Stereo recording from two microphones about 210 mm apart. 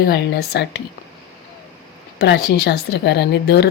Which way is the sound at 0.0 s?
50° left (ahead or behind).